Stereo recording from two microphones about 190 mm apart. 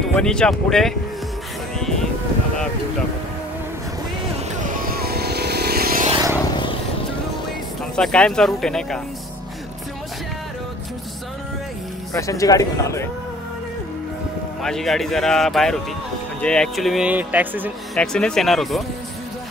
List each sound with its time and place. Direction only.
0.1 s speech: 5° left (ahead or behind)
1.8 s music: centre (ahead or behind)
4.6 s vehicle: 50° right (ahead or behind)
6.3 s vehicle: 25° left (ahead or behind)
7.9 s speech: 5° left (ahead or behind)
12.1 s speech: 15° left (ahead or behind)
14.6 s speech: centre (ahead or behind)
17.9 s speech: 5° left (ahead or behind)